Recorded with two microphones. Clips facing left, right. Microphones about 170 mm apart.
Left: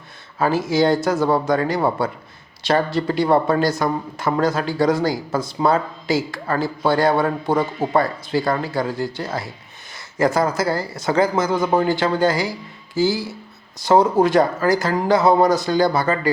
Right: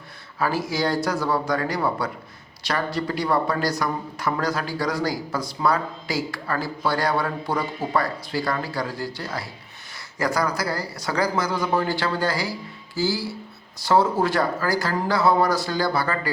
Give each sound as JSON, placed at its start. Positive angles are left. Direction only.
{"t": 0.3, "sound": "speech", "side_deg": 25}